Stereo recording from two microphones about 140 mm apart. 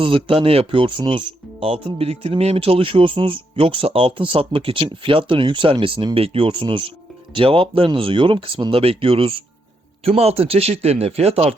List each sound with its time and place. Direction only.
0.0 s speech: 40° right (ahead or behind)